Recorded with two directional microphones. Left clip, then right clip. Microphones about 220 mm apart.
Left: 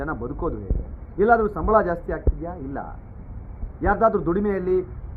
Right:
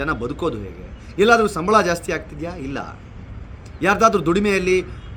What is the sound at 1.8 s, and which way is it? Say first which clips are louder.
Speech: right 4 dB; 15° right (ahead or behind).